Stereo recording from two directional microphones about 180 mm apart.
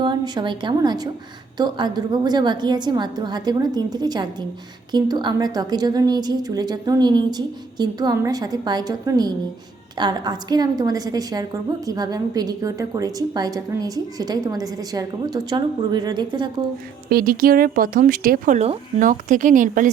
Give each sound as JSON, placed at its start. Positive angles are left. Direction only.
{"t": 0.0, "sound": "a woman's voice", "side_deg": -25}
{"t": 17.1, "sound": "speech", "side_deg": -55}